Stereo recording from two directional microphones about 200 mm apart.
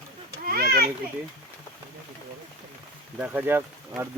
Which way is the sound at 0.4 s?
50° right (ahead or behind).